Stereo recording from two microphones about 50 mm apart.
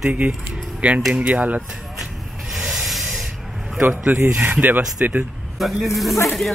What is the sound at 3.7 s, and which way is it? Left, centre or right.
Speech, right.